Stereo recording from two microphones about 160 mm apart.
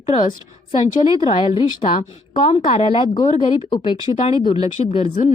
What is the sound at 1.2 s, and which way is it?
A woman's voice, 30° left (ahead or behind).